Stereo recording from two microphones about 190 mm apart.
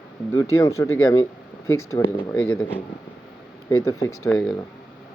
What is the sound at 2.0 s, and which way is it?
Speech, 20° left (ahead or behind).